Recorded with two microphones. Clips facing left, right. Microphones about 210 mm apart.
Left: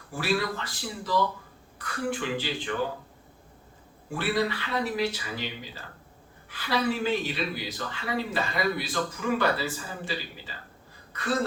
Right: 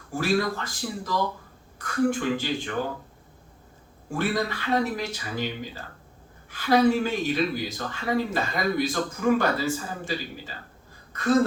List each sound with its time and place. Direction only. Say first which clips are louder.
0.1 s speech: right 4 dB; 45° right (ahead or behind)
4.1 s speech: right 1 dB; 45° right (ahead or behind)
11.1 s a sound: right 6 dB; 45° right (ahead or behind)